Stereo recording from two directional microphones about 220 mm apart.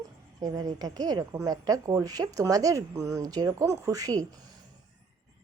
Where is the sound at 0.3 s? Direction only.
15° right (ahead or behind).